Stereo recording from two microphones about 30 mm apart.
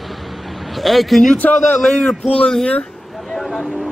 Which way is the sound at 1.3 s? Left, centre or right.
Left.